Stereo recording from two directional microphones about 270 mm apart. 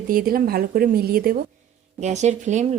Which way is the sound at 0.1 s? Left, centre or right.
Right.